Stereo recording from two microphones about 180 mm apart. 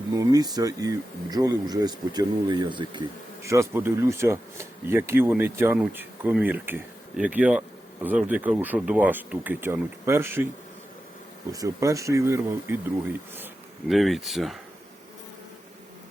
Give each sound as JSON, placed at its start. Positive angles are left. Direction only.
{"t": 0.1, "sound": "speech", "side_deg": -20}
{"t": 11.5, "sound": "speech", "side_deg": -20}
{"t": 13.8, "sound": "speech", "side_deg": 0}